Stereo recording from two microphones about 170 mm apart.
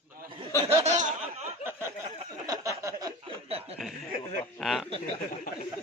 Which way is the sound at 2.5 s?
20° right (ahead or behind).